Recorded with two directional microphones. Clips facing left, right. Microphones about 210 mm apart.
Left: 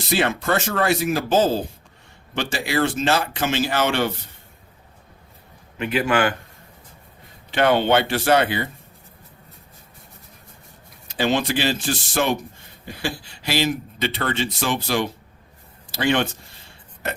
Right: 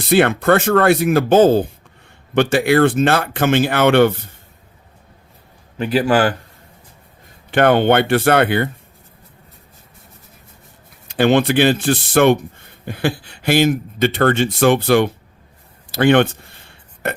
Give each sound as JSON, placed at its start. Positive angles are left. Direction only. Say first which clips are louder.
{"t": 0.0, "sound": "speech", "louder": "right 8 dB", "side_deg": -55}
{"t": 5.7, "sound": "a man's voice", "louder": "right 5 dB", "side_deg": -35}
{"t": 7.5, "sound": "speech", "louder": "right 5 dB", "side_deg": -55}
{"t": 11.1, "sound": "speech", "louder": "right 7 dB", "side_deg": -60}
{"t": 15.9, "sound": "a sound", "louder": "right 8 dB", "side_deg": -55}